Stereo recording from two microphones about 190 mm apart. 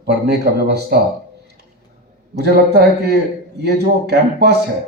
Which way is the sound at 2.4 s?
60° right (ahead or behind).